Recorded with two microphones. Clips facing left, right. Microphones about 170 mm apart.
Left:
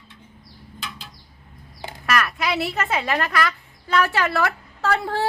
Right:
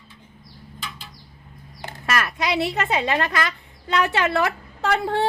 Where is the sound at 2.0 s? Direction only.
25° right (ahead or behind).